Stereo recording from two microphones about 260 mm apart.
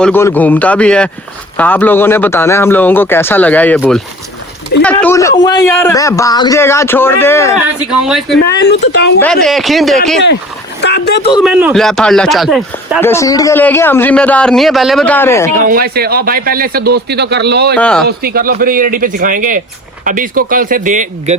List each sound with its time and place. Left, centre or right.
0.0 s a man's voice: centre
7.9 s speech: centre
8.4 s speech: left
9.2 s speech: centre
10.8 s speech: left
11.4 s speech: centre
15.6 s speech: right
17.7 s speech: centre
18.2 s speech: right